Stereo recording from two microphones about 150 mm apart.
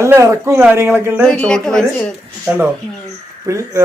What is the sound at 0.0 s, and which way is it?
Speech, 20° right (ahead or behind).